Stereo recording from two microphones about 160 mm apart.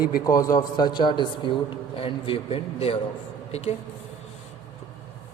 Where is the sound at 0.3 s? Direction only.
20° left (ahead or behind); by 3.8 s 40° left (ahead or behind).